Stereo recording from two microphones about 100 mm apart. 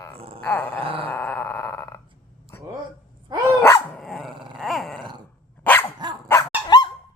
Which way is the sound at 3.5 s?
20° left (ahead or behind).